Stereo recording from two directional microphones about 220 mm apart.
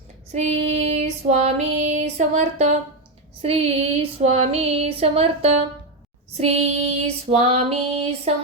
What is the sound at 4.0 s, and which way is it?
Female singing, 30° right (ahead or behind).